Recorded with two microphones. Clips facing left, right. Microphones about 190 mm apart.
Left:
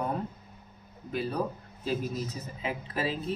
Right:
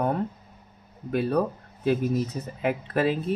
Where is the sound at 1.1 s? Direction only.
60° right (ahead or behind).